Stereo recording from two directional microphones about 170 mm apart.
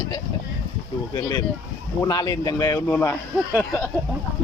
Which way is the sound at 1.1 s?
25° left (ahead or behind).